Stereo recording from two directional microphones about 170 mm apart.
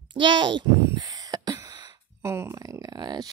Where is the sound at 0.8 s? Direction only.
20° right (ahead or behind).